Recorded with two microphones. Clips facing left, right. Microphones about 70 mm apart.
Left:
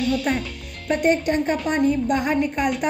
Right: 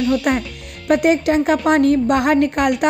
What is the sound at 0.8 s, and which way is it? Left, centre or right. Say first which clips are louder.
A woman's voice: right 5 dB; right.